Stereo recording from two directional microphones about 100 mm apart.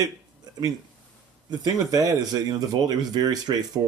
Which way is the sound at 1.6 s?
40° right (ahead or behind).